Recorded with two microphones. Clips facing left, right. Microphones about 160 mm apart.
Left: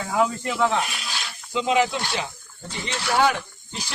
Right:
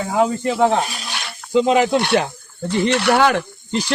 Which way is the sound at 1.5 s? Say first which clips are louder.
Right 7 dB; 50° right (ahead or behind).